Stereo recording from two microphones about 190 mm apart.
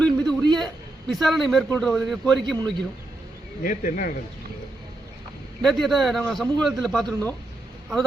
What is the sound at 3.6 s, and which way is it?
Speech, 45° left (ahead or behind).